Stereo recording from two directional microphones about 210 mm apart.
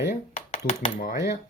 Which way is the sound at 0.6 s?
45° left (ahead or behind).